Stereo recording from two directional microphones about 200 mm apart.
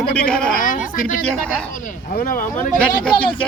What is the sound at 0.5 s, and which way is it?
Speech, 45° left (ahead or behind).